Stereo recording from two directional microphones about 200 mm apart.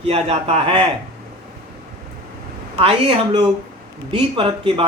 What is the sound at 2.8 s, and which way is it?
A woman's voice, 30° right (ahead or behind).